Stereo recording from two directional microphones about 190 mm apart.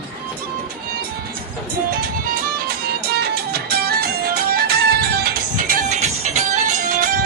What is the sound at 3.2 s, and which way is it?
Music, 55° right (ahead or behind).